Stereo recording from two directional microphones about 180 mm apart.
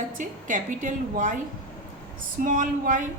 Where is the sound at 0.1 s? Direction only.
45° right (ahead or behind).